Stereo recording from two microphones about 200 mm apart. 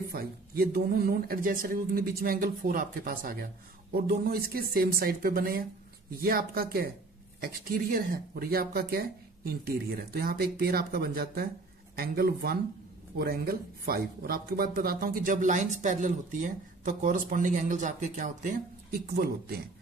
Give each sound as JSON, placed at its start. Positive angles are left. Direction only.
{"t": 0.1, "sound": "speech", "side_deg": -50}